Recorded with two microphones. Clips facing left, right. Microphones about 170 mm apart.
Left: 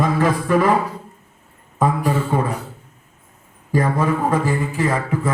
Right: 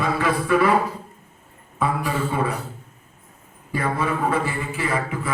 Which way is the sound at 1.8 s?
45° left (ahead or behind).